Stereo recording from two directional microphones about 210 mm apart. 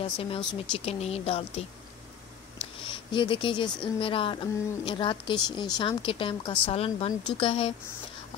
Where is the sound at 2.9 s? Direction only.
25° left (ahead or behind).